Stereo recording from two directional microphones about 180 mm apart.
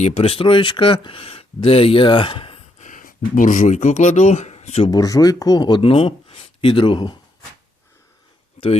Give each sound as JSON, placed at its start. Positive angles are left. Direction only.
{"t": 0.0, "sound": "speech", "side_deg": 35}
{"t": 2.8, "sound": "speech", "side_deg": 50}
{"t": 4.9, "sound": "speech", "side_deg": 20}
{"t": 8.6, "sound": "a sound", "side_deg": 35}